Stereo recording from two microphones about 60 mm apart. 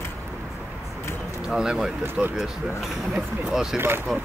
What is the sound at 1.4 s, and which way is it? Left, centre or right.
Speech, centre.